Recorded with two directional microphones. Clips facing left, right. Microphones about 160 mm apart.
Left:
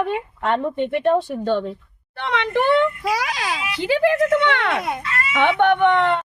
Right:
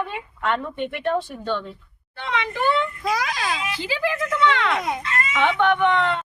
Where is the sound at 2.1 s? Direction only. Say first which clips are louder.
Left 5 dB; 65° left (ahead or behind).